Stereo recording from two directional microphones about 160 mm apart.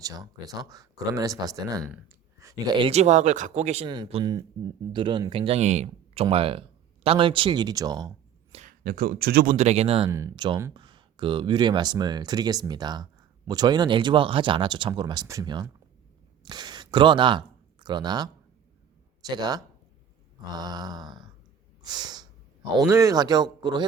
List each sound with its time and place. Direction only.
0.0 s speech: 25° right (ahead or behind)
2.4 s a sound: 20° right (ahead or behind)
2.7 s speech: 35° right (ahead or behind)
3.8 s speech: 30° right (ahead or behind)
8.8 s speech: 70° right (ahead or behind)
9.6 s speech: 45° right (ahead or behind)
10.1 s speech: 20° right (ahead or behind)
10.3 s speech: 30° right (ahead or behind)
21.8 s snort: 25° right (ahead or behind)
22.9 s speech: 20° right (ahead or behind)